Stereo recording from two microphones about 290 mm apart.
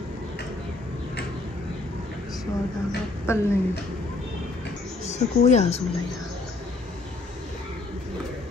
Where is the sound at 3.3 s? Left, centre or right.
Centre.